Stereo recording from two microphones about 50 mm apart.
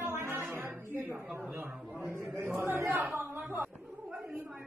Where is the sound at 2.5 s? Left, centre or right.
Right.